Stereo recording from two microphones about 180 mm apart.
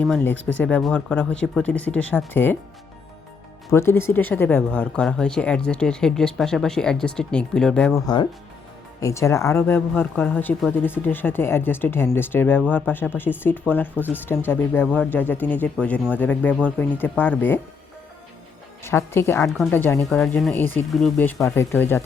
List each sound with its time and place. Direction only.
0.0 s speech: 5° left (ahead or behind)
3.7 s speech: 15° left (ahead or behind)
7.9 s speech: 25° left (ahead or behind)
18.8 s speech: 15° left (ahead or behind)
20.1 s speech: centre (ahead or behind)